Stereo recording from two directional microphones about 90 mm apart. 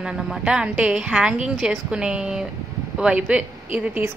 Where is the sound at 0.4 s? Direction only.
15° right (ahead or behind).